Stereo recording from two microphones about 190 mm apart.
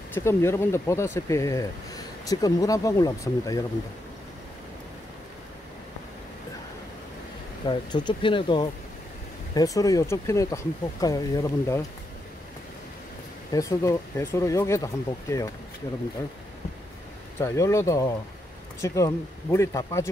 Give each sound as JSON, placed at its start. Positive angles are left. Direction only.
{"t": 0.1, "sound": "speech", "side_deg": 15}
{"t": 7.6, "sound": "speech", "side_deg": 25}
{"t": 13.5, "sound": "speech", "side_deg": 15}
{"t": 17.4, "sound": "speech", "side_deg": 15}